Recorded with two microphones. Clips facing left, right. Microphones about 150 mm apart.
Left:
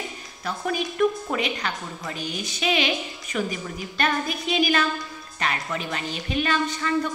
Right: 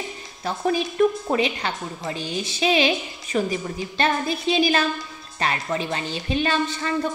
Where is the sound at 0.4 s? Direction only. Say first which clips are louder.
Right 4 dB; 30° right (ahead or behind).